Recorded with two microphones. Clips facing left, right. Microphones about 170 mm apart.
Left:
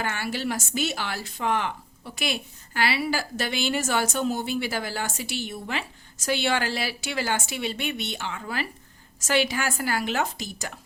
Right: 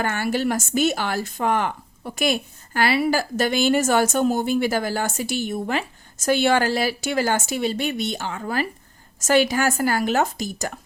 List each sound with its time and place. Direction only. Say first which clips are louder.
0.0 s speech: right 6 dB; 50° right (ahead or behind)